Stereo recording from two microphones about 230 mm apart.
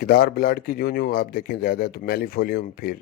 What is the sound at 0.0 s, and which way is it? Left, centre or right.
A man's voice, left.